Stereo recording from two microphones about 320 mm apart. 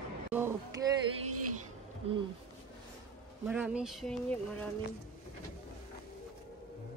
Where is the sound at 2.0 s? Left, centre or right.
Centre.